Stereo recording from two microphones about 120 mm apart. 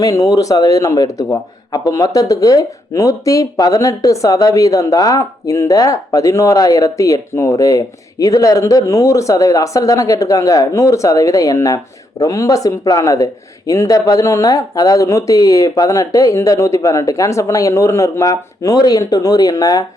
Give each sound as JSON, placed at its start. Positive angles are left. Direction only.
{"t": 0.0, "sound": "speech", "side_deg": 30}